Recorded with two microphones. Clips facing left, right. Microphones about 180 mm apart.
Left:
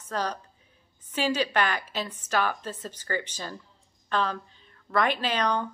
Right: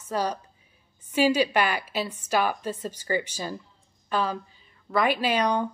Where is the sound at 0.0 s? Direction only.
10° right (ahead or behind).